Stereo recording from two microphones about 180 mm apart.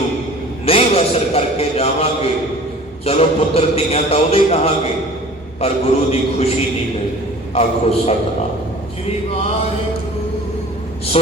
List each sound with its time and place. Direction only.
0.6 s a man's voice: 35° left (ahead or behind)
7.5 s a man's voice: 35° left (ahead or behind)